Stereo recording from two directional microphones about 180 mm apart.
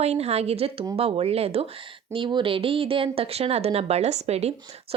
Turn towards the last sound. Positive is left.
turn(degrees=-35)  # may be behind; listen again after turning